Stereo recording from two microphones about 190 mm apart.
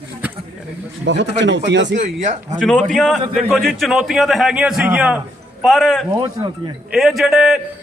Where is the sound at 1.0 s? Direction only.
65° right (ahead or behind).